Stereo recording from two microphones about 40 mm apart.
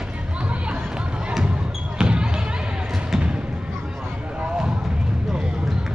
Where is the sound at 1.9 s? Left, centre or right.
Right.